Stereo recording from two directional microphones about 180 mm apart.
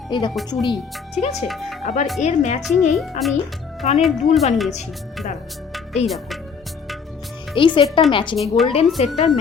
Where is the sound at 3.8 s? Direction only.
35° left (ahead or behind).